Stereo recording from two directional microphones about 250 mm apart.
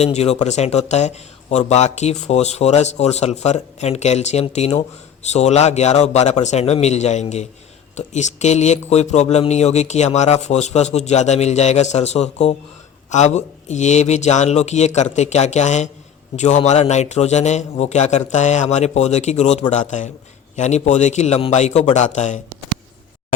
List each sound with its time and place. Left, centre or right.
0.0 s speech: left